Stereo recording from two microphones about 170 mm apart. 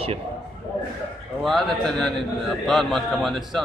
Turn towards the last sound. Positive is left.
turn(degrees=0)  # may be behind; listen again after turning